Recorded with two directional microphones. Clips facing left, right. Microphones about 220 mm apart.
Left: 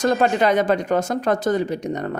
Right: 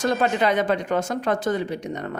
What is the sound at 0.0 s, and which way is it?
Speech, 40° left (ahead or behind).